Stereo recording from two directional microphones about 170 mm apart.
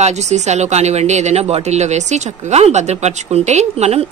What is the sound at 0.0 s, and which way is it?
Speech, 40° right (ahead or behind).